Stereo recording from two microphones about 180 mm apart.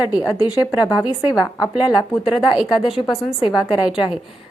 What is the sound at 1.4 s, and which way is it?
Speech, 20° left (ahead or behind).